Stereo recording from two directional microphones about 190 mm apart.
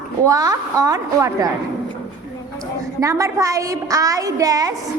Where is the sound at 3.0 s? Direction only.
15° right (ahead or behind).